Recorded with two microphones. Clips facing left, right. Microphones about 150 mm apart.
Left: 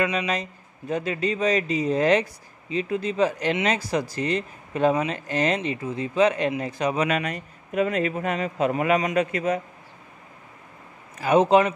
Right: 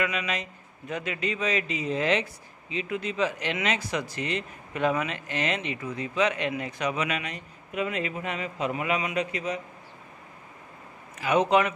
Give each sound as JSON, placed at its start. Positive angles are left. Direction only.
{"t": 0.0, "sound": "speech", "side_deg": 35}
{"t": 11.1, "sound": "speech", "side_deg": 35}